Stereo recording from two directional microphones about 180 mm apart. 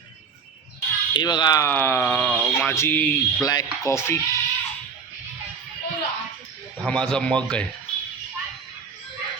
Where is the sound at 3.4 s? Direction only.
20° left (ahead or behind).